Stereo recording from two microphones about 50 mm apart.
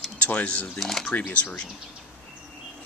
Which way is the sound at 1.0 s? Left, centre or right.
Left.